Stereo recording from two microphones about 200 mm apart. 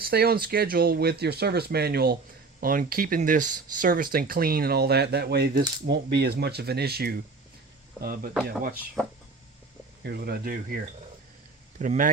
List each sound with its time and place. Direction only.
0.0 s speech: 50° right (ahead or behind)
10.0 s speech: 55° right (ahead or behind)